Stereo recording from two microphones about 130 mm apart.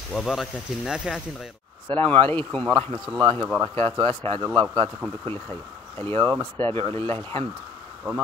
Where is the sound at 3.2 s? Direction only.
35° right (ahead or behind).